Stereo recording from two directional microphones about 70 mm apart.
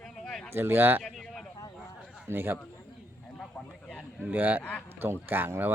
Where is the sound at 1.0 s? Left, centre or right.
Centre.